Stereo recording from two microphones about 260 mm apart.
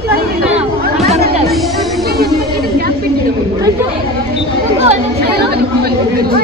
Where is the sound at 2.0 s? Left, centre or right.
Right.